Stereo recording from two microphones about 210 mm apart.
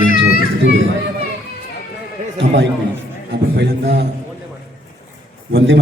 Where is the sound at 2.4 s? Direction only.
55° right (ahead or behind).